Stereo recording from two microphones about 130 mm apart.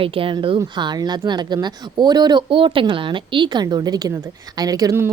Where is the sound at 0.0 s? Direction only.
45° right (ahead or behind).